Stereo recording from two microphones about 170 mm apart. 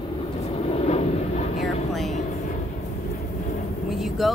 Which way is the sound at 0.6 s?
40° left (ahead or behind).